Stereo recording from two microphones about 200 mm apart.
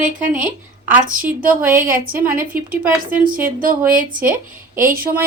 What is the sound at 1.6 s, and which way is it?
Speech, 45° right (ahead or behind).